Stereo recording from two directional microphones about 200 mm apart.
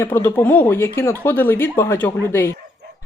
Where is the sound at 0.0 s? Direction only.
10° left (ahead or behind).